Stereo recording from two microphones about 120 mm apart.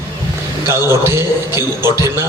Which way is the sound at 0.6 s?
20° right (ahead or behind).